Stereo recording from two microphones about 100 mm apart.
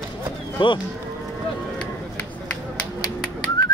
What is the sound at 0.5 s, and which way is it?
Speech, 55° left (ahead or behind).